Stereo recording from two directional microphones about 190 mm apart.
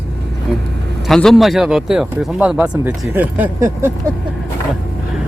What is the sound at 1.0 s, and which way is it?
Speech, centre (ahead or behind).